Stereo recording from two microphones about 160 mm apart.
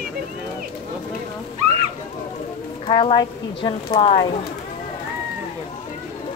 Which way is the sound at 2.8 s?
35° left (ahead or behind).